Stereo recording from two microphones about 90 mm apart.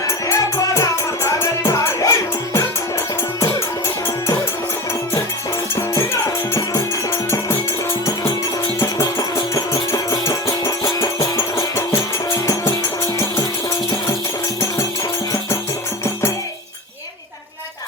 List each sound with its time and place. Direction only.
0.3 s music: 35° left (ahead or behind)
5.7 s music: 35° left (ahead or behind)
8.8 s music: 40° left (ahead or behind)